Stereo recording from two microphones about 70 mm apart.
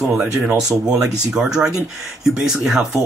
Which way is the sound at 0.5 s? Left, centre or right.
Centre.